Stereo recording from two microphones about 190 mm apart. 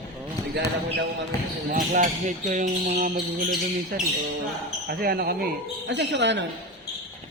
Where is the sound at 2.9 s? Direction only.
50° right (ahead or behind); by 6.4 s 70° right (ahead or behind).